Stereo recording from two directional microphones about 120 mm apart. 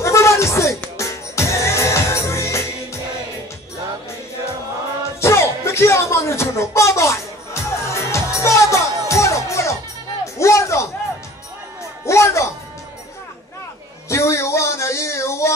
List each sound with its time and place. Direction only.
0.0 s a sound: 25° left (ahead or behind)
0.9 s music: 25° left (ahead or behind)
5.2 s music: 20° left (ahead or behind)
12.1 s music: 25° left (ahead or behind)
14.0 s music: 25° left (ahead or behind)